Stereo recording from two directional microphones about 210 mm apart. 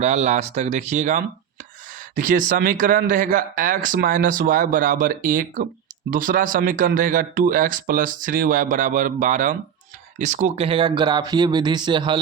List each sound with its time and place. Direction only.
0.0 s speech: 30° right (ahead or behind)